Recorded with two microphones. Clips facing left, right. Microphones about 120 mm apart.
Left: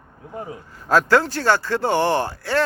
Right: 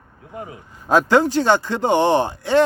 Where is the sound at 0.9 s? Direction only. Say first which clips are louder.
Right 2 dB; 15° right (ahead or behind).